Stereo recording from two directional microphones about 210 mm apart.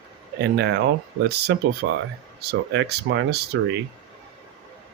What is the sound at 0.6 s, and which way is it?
Speech, 55° right (ahead or behind).